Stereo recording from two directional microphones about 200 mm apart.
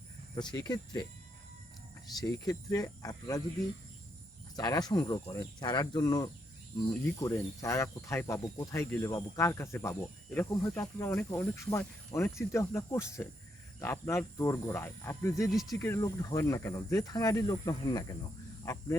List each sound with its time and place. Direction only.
0.3 s speech: 20° left (ahead or behind)
2.2 s speech: 20° left (ahead or behind)
4.5 s speech: 20° left (ahead or behind)
15.4 s speech: centre (ahead or behind)
15.7 s speech: 15° left (ahead or behind)